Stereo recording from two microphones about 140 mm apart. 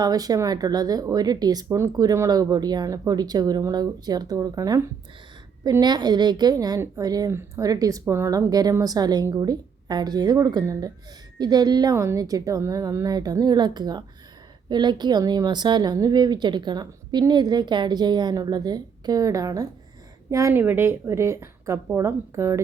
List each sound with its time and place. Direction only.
0.0 s a woman's voice: 25° right (ahead or behind)